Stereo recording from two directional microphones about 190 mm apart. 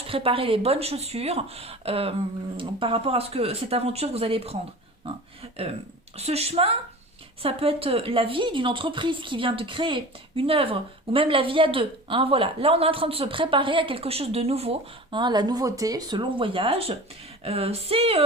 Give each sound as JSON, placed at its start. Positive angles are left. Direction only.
{"t": 0.1, "sound": "a woman's voice", "side_deg": -30}